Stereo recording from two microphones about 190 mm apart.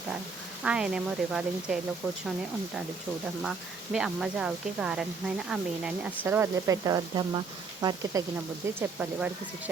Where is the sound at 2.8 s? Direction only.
5° right (ahead or behind).